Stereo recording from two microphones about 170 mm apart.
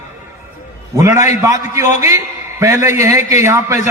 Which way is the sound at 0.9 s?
15° right (ahead or behind).